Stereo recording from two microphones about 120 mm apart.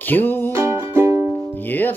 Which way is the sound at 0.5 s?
20° right (ahead or behind).